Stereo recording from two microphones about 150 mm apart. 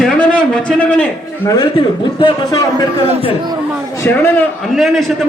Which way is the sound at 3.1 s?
40° right (ahead or behind).